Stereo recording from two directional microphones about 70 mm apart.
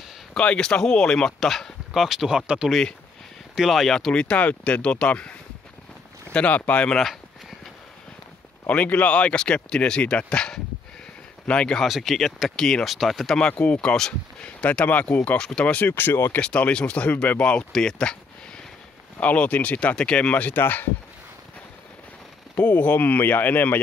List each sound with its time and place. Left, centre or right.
0.3 s speech: centre
3.5 s speech: centre
6.3 s speech: left
8.6 s speech: left
11.8 s speech: centre
13.4 s speech: centre
14.6 s speech: left
15.9 s speech: left
16.3 s speech: centre
19.1 s speech: left
22.6 s speech: left